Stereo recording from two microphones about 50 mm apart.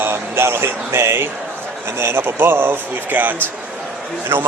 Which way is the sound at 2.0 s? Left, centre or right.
Right.